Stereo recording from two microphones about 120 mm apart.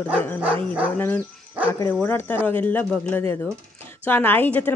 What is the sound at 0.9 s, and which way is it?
Speech, 15° left (ahead or behind).